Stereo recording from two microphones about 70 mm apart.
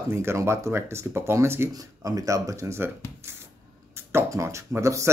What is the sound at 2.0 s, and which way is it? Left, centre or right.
Speech, right.